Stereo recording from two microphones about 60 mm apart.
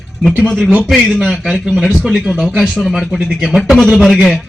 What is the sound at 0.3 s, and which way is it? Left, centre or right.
Speech, centre.